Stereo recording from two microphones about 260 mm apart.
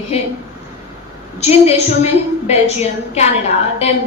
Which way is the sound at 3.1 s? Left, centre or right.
Left.